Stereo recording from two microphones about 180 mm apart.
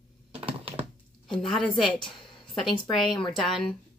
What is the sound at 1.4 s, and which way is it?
Speech, centre (ahead or behind).